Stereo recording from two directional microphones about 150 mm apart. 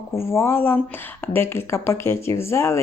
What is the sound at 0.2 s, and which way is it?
Speech, 15° left (ahead or behind).